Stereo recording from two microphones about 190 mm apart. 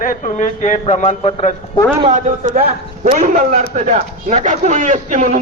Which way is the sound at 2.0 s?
40° right (ahead or behind).